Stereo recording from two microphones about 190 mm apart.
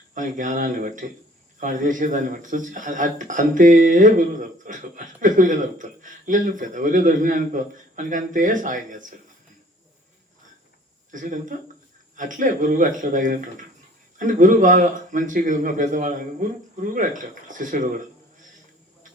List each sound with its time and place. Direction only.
0.1 s a man's voice: 45° right (ahead or behind)
11.1 s a man's voice: 45° right (ahead or behind)